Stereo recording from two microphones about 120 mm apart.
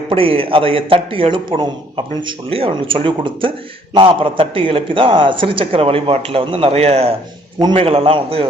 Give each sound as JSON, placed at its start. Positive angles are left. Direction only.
{"t": 0.1, "sound": "a man's voice", "side_deg": -50}